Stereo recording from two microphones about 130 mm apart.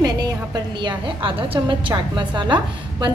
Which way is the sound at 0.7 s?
40° right (ahead or behind).